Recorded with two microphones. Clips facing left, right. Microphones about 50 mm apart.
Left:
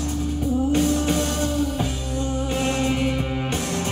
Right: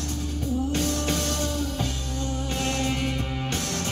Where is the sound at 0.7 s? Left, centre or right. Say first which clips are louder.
Left 6 dB; centre.